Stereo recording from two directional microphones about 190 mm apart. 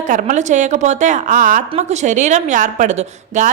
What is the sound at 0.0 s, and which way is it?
A woman's voice, 40° right (ahead or behind).